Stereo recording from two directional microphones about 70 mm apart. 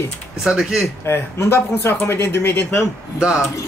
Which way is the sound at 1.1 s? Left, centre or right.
Left.